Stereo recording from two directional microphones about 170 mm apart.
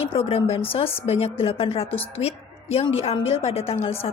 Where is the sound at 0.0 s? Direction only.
35° left (ahead or behind).